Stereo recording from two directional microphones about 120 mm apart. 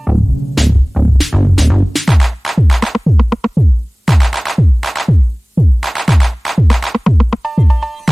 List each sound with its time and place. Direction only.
0.0 s music: centre (ahead or behind)